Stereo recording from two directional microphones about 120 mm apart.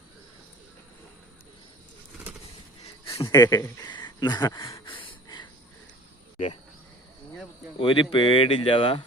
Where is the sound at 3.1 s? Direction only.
25° left (ahead or behind).